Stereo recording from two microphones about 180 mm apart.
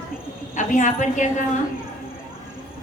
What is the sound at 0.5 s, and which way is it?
Speech, 45° left (ahead or behind).